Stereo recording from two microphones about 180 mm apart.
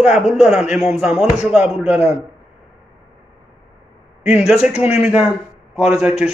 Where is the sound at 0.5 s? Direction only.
Centre (ahead or behind).